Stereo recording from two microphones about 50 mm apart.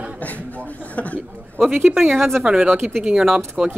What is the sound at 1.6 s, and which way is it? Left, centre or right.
Speech, centre.